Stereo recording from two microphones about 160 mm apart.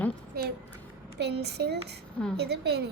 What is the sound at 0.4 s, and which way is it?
Speech, 75° right (ahead or behind).